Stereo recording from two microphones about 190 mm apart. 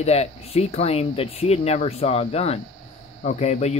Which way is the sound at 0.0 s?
35° left (ahead or behind).